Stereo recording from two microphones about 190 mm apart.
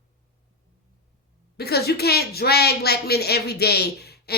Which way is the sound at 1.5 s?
55° left (ahead or behind).